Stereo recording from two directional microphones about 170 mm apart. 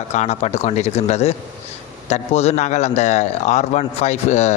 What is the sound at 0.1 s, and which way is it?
A man's voice, 40° left (ahead or behind).